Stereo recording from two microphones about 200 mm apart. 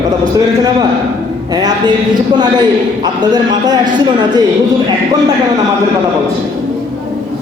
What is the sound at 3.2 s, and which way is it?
A man's voice, 20° right (ahead or behind).